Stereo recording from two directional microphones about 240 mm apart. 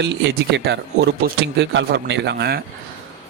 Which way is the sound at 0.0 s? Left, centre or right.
Right.